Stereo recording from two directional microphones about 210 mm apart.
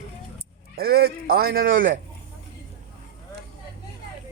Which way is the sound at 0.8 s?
50° right (ahead or behind).